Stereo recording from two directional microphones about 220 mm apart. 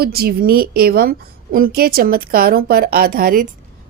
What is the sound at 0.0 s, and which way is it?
A woman's voice, 45° right (ahead or behind).